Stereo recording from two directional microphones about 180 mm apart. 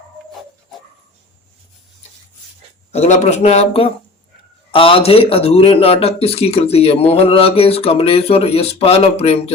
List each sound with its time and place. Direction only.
2.9 s speech: 35° left (ahead or behind)